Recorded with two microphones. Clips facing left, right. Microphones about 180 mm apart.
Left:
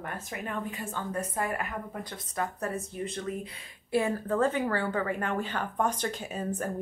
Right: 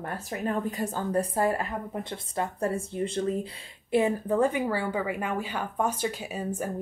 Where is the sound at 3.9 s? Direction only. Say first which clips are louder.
Right 3 dB; 15° right (ahead or behind).